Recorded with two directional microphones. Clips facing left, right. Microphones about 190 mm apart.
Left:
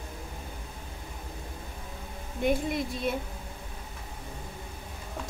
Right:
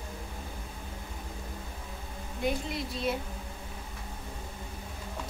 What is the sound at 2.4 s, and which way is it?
Child singing, 50° left (ahead or behind).